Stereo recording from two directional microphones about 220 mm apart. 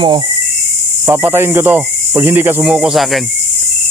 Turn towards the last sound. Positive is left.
turn(degrees=0)  # may be behind; listen again after turning